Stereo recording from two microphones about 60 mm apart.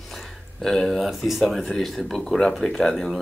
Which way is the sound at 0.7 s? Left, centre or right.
Centre.